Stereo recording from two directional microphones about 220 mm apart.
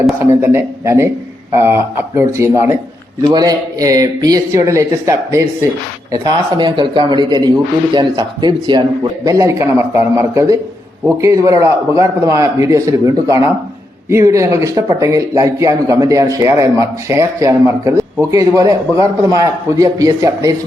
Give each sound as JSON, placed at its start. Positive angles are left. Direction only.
{"t": 0.0, "sound": "a man's voice", "side_deg": -10}